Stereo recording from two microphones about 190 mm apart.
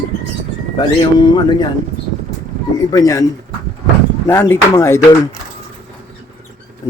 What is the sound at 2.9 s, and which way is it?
Speech, 20° left (ahead or behind).